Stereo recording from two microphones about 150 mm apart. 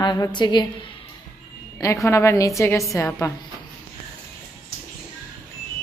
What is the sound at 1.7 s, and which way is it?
A woman's voice, 20° left (ahead or behind).